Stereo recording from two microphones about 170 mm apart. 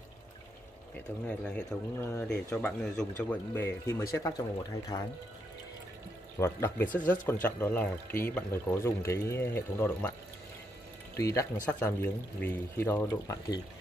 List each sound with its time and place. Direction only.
1.2 s speech: 5° left (ahead or behind)
6.3 s speech: 15° left (ahead or behind)
11.1 s speech: 20° left (ahead or behind)